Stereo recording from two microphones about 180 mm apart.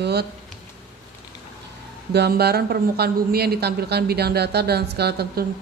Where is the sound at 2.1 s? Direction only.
65° right (ahead or behind).